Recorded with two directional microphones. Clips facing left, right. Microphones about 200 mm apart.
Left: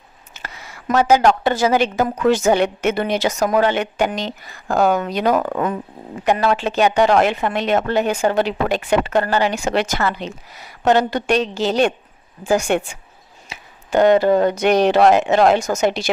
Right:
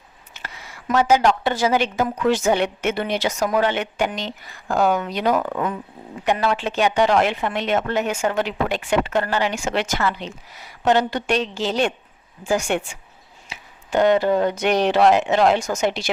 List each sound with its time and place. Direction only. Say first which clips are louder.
0.3 s a woman's voice: left 2 dB; 40° left (ahead or behind)